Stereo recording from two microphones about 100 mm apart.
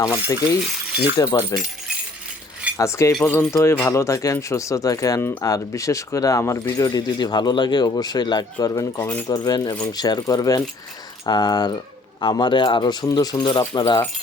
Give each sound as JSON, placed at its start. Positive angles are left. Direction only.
{"t": 0.0, "sound": "speech", "side_deg": 35}
{"t": 2.7, "sound": "speech", "side_deg": 30}
{"t": 8.7, "sound": "speech", "side_deg": 30}
{"t": 9.2, "sound": "speech", "side_deg": 40}